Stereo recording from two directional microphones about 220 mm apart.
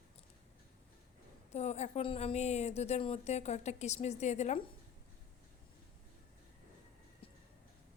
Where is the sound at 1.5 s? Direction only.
30° left (ahead or behind).